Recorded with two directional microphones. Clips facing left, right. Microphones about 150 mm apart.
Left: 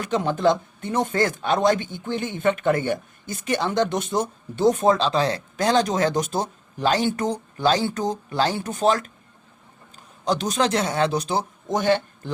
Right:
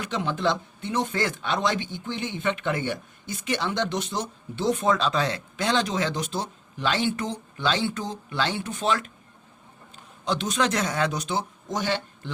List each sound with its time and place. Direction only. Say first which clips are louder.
0.0 s speech: left 5 dB; 45° left (ahead or behind)
11.7 s speech: left 7 dB; 50° left (ahead or behind)